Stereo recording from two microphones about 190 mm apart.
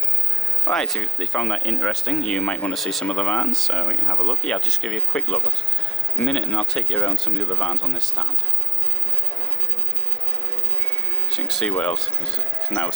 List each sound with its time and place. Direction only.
0.7 s speech: centre (ahead or behind)
11.3 s speech: centre (ahead or behind)